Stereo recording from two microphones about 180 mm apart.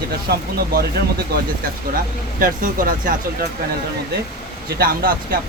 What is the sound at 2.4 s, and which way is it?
Speech, 50° right (ahead or behind).